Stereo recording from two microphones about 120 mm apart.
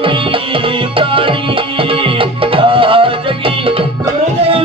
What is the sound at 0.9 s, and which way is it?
Music, 45° right (ahead or behind).